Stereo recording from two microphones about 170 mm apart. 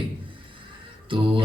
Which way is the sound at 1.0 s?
30° right (ahead or behind).